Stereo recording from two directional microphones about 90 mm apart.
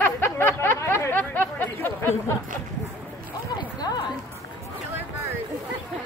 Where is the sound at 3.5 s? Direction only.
50° left (ahead or behind).